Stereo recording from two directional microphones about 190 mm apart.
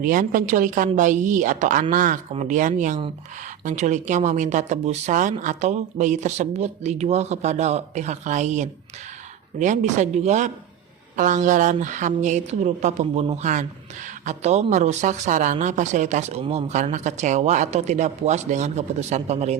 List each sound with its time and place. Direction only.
0.0 s a woman's voice: 45° right (ahead or behind)